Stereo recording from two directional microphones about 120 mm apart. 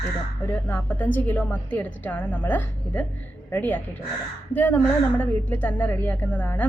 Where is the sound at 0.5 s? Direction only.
15° left (ahead or behind).